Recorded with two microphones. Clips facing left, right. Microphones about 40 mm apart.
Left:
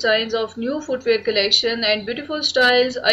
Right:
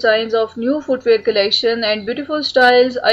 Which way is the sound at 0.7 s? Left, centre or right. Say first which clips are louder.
Right 4 dB; right.